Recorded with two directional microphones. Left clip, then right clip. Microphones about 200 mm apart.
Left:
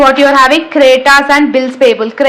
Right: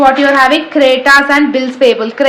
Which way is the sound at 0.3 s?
20° left (ahead or behind).